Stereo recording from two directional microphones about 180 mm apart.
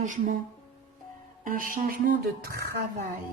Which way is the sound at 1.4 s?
50° right (ahead or behind).